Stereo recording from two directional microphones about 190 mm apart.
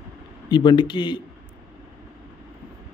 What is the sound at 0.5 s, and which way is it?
Speech, 25° left (ahead or behind).